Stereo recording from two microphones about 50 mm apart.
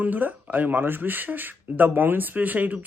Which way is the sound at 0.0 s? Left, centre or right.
Right.